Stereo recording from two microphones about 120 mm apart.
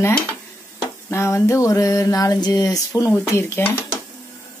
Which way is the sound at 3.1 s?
15° left (ahead or behind).